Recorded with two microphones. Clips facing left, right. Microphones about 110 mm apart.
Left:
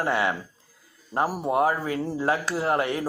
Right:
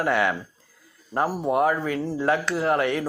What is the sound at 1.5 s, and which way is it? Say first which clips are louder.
Speech: right 1 dB; 30° left (ahead or behind).